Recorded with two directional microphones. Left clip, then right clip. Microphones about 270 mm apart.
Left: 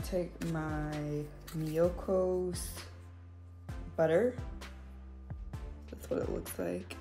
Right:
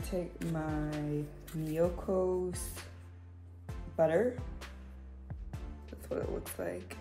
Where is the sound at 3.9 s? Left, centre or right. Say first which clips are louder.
Even; left.